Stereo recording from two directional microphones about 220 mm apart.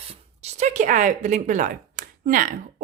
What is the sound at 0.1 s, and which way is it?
Speech, 30° right (ahead or behind).